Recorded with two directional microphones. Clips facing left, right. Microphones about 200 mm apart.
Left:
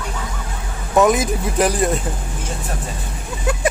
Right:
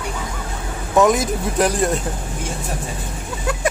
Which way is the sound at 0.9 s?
Centre (ahead or behind).